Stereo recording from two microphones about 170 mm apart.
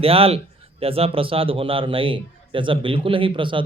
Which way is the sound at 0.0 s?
35° right (ahead or behind).